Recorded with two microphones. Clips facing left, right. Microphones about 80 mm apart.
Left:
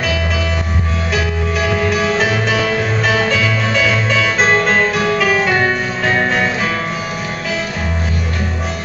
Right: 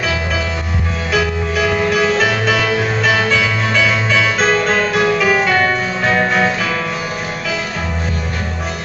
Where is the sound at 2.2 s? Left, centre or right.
Right.